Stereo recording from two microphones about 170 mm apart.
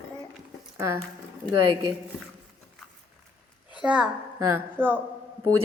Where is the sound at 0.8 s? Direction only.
20° right (ahead or behind).